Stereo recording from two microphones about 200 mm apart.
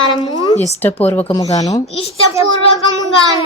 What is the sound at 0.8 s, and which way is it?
Speech, 10° left (ahead or behind).